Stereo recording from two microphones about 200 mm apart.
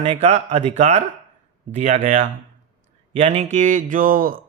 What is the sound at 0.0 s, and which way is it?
A man's voice, 30° right (ahead or behind).